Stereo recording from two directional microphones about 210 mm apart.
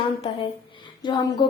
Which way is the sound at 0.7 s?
20° left (ahead or behind).